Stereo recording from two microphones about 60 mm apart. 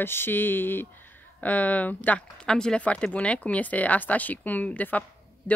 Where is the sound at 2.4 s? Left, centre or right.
Centre.